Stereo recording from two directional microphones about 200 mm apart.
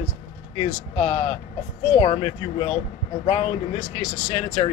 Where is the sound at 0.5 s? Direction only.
30° left (ahead or behind).